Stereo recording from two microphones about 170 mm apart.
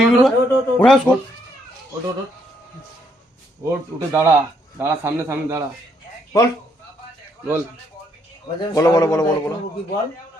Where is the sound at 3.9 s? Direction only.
15° right (ahead or behind).